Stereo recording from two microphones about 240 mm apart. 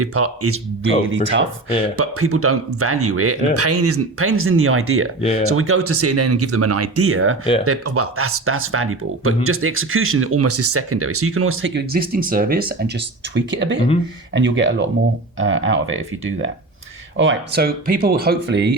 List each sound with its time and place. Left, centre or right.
0.0 s speech: right
1.1 s speech: right
2.0 s speech: right
13.5 s speech: right